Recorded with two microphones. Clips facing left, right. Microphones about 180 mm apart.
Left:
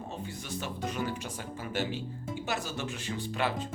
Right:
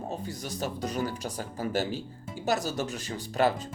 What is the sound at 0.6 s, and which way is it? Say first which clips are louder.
Speech: right 4 dB; 40° right (ahead or behind).